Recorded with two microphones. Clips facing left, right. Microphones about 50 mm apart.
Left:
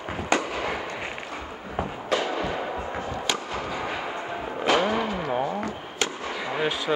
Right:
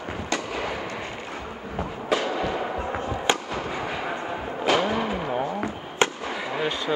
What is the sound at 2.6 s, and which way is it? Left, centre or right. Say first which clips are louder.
Fireworks: right 2 dB; centre.